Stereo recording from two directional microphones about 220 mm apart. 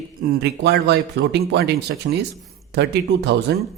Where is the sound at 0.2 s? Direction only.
45° right (ahead or behind).